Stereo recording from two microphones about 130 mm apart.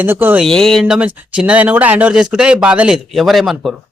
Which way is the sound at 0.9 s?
10° right (ahead or behind).